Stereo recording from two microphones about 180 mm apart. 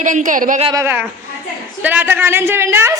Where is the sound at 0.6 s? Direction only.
15° right (ahead or behind).